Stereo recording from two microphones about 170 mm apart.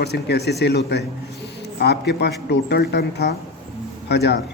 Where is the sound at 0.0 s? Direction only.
75° left (ahead or behind).